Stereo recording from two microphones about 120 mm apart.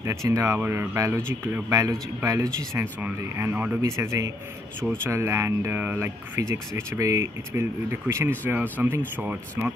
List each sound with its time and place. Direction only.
0.0 s speech: 25° right (ahead or behind)